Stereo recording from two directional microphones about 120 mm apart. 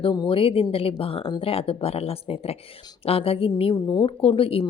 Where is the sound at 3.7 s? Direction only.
40° left (ahead or behind).